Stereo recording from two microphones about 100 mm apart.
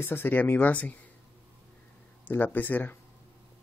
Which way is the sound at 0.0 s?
20° left (ahead or behind).